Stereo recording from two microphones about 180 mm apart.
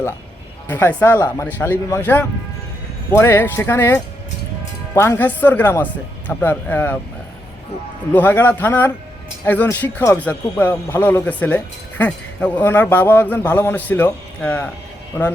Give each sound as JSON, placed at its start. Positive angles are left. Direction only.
{"t": 0.7, "sound": "speech", "side_deg": 10}
{"t": 8.1, "sound": "speech", "side_deg": 10}